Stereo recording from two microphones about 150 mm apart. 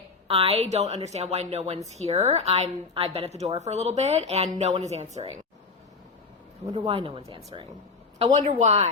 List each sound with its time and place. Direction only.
0.3 s a woman's voice: 40° right (ahead or behind)
6.7 s speech: 35° right (ahead or behind)
8.2 s a woman's voice: 50° right (ahead or behind)